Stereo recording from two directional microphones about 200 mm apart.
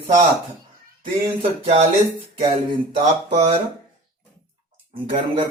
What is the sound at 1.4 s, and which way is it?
Speech, 30° right (ahead or behind).